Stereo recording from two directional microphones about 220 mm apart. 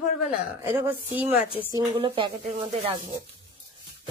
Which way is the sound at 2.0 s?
25° right (ahead or behind).